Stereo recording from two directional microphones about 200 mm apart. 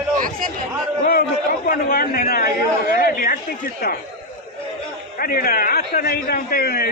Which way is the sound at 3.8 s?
50° left (ahead or behind).